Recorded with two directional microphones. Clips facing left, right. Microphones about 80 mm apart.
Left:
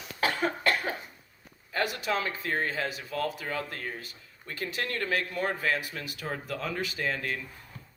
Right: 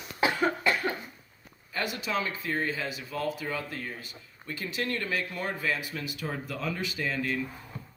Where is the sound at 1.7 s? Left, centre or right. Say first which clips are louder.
Left 2 dB; left.